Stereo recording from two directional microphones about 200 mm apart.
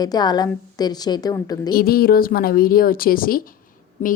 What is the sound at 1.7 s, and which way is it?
A woman's voice, 50° left (ahead or behind).